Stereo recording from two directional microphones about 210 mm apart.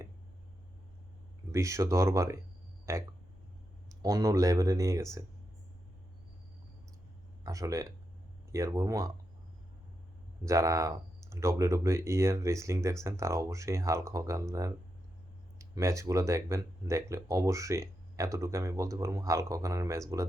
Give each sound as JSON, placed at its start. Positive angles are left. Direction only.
{"t": 1.5, "sound": "speech", "side_deg": -15}
{"t": 7.4, "sound": "speech", "side_deg": -15}
{"t": 10.4, "sound": "speech", "side_deg": -15}